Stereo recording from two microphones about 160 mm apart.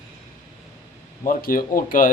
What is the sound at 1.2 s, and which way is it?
Speech, 60° left (ahead or behind).